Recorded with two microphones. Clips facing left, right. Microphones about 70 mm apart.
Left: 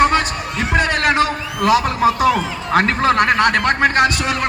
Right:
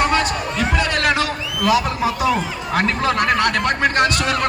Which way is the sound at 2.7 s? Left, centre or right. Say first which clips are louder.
Left 4 dB; left.